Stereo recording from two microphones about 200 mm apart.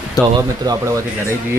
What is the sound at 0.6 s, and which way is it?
Speech, 20° right (ahead or behind).